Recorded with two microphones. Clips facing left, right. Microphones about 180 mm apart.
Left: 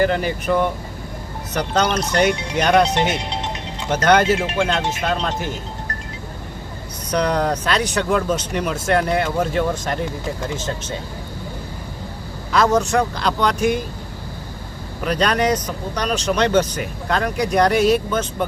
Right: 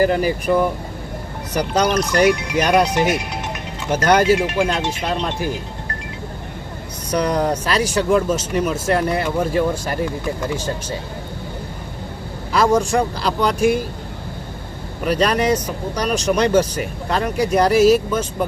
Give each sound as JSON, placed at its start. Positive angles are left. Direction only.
{"t": 0.1, "sound": "speech", "side_deg": -5}
{"t": 2.0, "sound": "speech", "side_deg": 30}
{"t": 2.6, "sound": "speech", "side_deg": -10}
{"t": 3.2, "sound": "music", "side_deg": 30}
{"t": 3.8, "sound": "speech", "side_deg": -10}
{"t": 7.1, "sound": "speech", "side_deg": -10}
{"t": 12.5, "sound": "speech", "side_deg": -10}
{"t": 15.0, "sound": "speech", "side_deg": -10}